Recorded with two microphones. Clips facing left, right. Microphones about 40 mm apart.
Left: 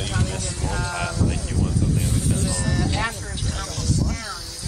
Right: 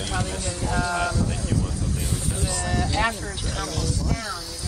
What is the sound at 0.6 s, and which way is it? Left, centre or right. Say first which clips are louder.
Sheep: right 4 dB; centre.